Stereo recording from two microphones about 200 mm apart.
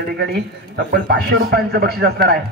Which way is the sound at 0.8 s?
55° right (ahead or behind).